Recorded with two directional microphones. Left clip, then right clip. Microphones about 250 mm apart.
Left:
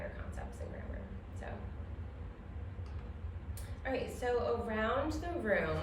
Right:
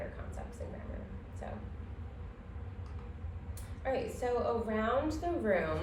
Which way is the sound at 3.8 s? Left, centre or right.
Centre.